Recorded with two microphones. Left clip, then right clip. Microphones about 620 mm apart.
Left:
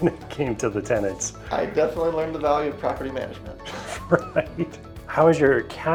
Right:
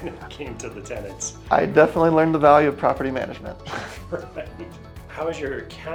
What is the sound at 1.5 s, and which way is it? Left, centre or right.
Speech, right.